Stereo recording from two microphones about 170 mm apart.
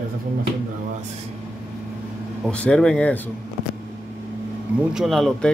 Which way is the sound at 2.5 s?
5° left (ahead or behind).